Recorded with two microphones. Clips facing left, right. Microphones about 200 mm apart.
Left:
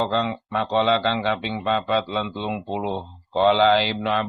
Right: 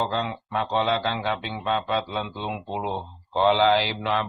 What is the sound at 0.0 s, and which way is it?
Speech, 70° left (ahead or behind).